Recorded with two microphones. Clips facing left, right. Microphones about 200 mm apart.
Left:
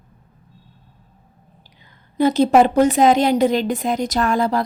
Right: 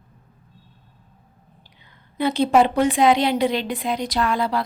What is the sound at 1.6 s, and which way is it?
A woman's voice, 40° left (ahead or behind).